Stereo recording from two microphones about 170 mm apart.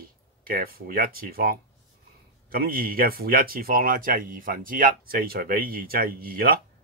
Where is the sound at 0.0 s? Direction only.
60° right (ahead or behind).